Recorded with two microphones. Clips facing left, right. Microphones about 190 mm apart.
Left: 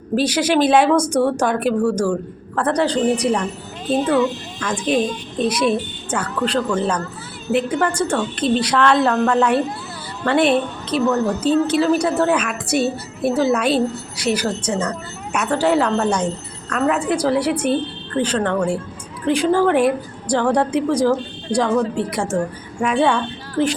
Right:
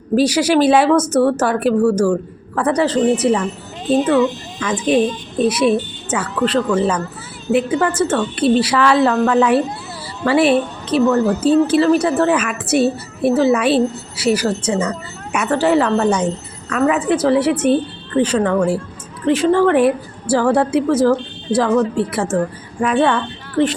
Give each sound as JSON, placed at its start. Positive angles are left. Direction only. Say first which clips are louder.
{"t": 0.2, "sound": "speech", "louder": "right 3 dB", "side_deg": -10}
{"t": 4.6, "sound": "speech", "louder": "right 4 dB", "side_deg": -5}